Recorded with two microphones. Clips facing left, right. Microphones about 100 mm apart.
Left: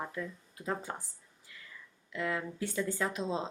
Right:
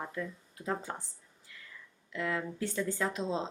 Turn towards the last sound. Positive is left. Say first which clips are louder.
# right 1 dB
turn(degrees=5)  # may be behind; listen again after turning